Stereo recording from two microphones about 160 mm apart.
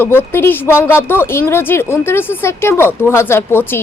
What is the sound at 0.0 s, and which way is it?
Speech, 10° left (ahead or behind).